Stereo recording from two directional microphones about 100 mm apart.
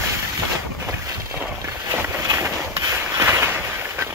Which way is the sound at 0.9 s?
25° right (ahead or behind).